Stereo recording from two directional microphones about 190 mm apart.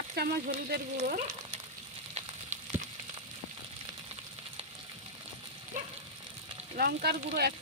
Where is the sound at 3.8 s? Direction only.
30° right (ahead or behind).